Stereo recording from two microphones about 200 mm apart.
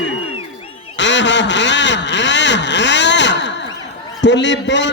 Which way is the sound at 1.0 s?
65° left (ahead or behind).